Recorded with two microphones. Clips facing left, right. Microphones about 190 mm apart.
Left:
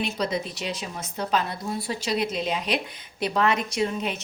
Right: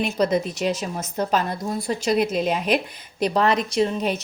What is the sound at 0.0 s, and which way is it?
A woman's voice, 50° right (ahead or behind).